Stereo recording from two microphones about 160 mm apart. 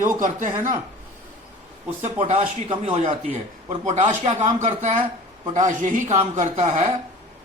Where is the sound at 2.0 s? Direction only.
45° right (ahead or behind).